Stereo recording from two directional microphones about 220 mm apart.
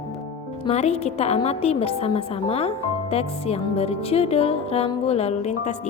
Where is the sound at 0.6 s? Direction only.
30° left (ahead or behind).